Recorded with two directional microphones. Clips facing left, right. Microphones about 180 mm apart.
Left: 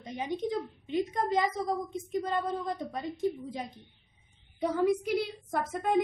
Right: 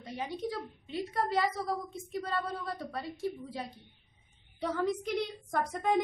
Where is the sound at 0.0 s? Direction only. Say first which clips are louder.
Left 3 dB; 20° left (ahead or behind).